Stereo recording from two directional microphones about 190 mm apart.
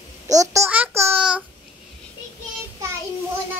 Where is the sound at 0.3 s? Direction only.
15° right (ahead or behind).